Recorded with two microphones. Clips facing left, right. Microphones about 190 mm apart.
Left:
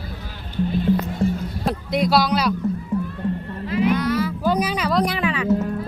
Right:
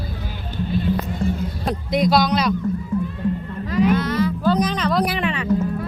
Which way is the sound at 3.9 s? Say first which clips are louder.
Right 1 dB; 10° left (ahead or behind).